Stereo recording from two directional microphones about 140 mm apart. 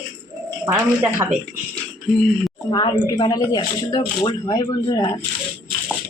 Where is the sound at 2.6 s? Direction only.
30° left (ahead or behind).